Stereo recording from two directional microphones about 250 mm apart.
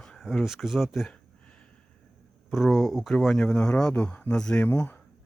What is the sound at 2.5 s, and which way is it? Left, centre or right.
Speech, centre.